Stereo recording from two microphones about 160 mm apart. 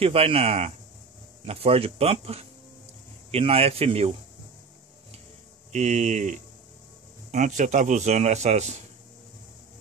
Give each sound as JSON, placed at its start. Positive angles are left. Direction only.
{"t": 0.0, "sound": "speech", "side_deg": -35}
{"t": 5.7, "sound": "speech", "side_deg": -50}